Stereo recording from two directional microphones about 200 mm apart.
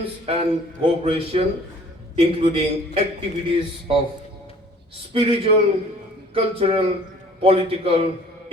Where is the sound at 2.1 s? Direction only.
30° right (ahead or behind).